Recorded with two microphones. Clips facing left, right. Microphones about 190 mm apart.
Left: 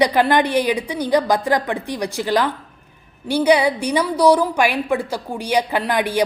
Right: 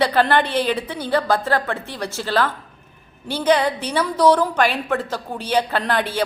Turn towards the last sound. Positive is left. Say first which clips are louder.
# left 2 dB
turn(degrees=15)  # may be behind; listen again after turning